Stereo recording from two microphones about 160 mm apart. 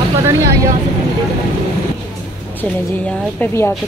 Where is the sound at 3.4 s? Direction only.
15° left (ahead or behind).